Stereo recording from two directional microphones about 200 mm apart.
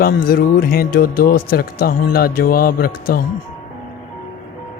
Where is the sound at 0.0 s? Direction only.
50° left (ahead or behind).